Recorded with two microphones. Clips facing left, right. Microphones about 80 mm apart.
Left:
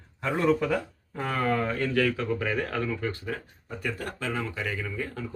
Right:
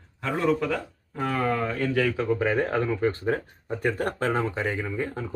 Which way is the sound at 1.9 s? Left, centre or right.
Centre.